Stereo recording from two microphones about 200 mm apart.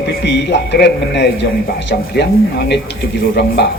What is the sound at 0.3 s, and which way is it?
A man's voice, 60° left (ahead or behind).